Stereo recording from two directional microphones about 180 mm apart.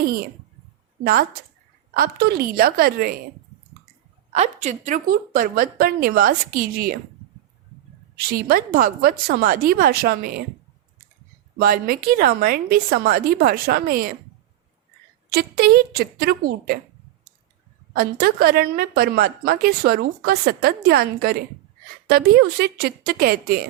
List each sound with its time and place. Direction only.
0.0 s speech: 55° right (ahead or behind)
1.9 s a woman's voice: 60° right (ahead or behind)
4.3 s a woman's voice: 40° right (ahead or behind)
8.3 s a woman's voice: 55° right (ahead or behind)
11.6 s a woman's voice: 55° right (ahead or behind)
15.3 s a woman's voice: 60° right (ahead or behind)
17.9 s a woman's voice: 55° right (ahead or behind)